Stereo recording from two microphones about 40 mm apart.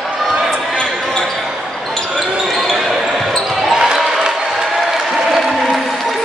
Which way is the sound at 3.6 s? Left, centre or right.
Centre.